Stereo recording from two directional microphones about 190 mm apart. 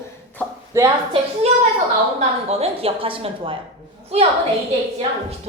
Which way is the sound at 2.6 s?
30° right (ahead or behind).